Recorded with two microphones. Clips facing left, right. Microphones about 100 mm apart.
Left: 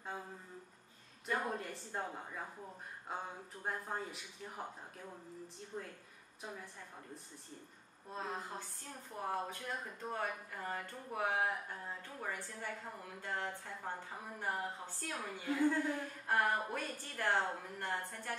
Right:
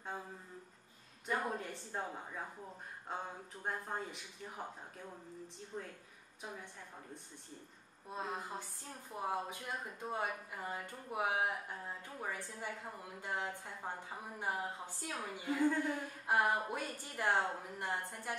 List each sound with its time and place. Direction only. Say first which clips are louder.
1.2 s speech: even; centre (ahead or behind)
8.1 s a woman's voice: right 1 dB; 10° right (ahead or behind)
15.9 s a woman's voice: right 1 dB; 15° right (ahead or behind)